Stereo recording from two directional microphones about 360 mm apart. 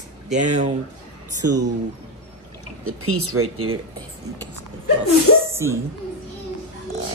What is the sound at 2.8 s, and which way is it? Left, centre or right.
Speech, right.